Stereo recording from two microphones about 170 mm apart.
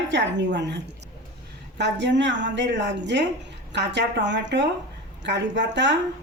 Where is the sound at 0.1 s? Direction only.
90° right.